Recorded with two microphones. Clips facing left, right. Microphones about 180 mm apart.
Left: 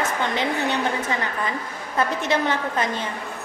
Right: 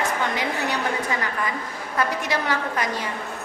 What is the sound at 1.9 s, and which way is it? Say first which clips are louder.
Speech: left 3 dB; 25° left (ahead or behind).